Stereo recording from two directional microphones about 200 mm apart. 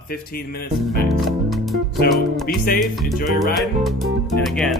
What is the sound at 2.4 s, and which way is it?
Speech, 50° left (ahead or behind).